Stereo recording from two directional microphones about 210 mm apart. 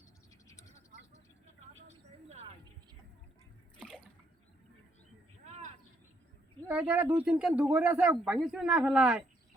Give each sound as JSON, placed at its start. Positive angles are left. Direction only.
{"t": 1.7, "sound": "a sound", "side_deg": -30}
{"t": 3.8, "sound": "water", "side_deg": 5}
{"t": 6.7, "sound": "speech", "side_deg": -10}